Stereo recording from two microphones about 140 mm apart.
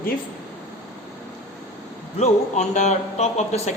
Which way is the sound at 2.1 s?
55° left (ahead or behind).